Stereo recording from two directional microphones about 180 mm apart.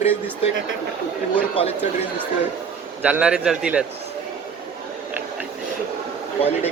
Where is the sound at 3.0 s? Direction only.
5° right (ahead or behind).